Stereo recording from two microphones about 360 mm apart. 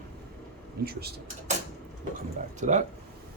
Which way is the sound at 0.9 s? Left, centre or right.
Right.